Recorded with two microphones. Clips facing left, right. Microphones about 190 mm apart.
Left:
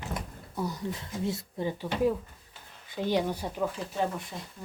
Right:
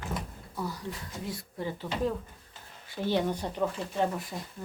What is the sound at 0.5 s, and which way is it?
Speech, 20° left (ahead or behind).